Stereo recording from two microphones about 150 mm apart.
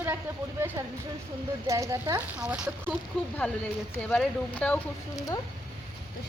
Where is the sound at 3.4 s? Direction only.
10° left (ahead or behind).